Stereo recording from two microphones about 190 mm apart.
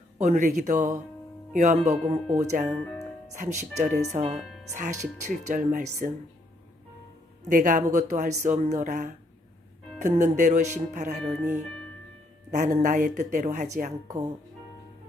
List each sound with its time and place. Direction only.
0.2 s speech: 40° right (ahead or behind)
4.4 s speech: centre (ahead or behind)
4.7 s speech: 40° right (ahead or behind)
7.4 s a man's voice: 40° right (ahead or behind)
12.5 s a man's voice: 40° right (ahead or behind)